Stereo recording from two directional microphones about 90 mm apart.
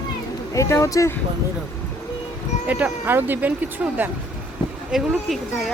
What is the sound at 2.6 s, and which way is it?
Speech, 20° right (ahead or behind).